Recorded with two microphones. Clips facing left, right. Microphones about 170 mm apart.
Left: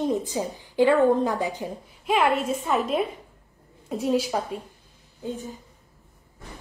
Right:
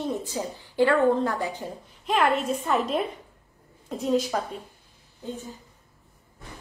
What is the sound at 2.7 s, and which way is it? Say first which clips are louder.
A woman's voice: left 1 dB; 5° left (ahead or behind).